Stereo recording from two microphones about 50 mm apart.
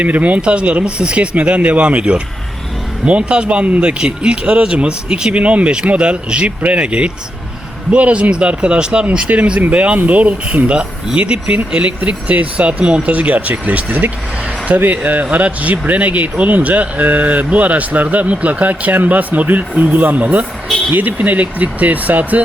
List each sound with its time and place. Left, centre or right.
0.0 s speech: right